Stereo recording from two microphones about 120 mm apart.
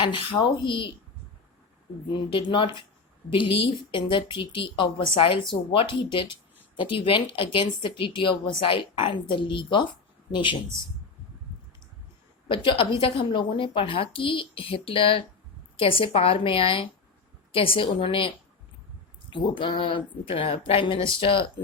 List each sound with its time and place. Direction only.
0.0 s speech: 45° left (ahead or behind)
2.1 s speech: 45° left (ahead or behind)
12.5 s speech: 45° left (ahead or behind)
19.3 s speech: 40° left (ahead or behind)